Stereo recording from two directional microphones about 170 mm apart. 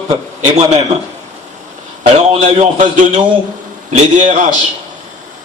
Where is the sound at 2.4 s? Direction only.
45° right (ahead or behind).